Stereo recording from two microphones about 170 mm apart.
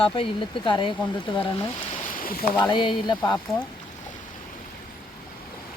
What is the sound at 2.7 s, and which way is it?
Speech, 30° left (ahead or behind).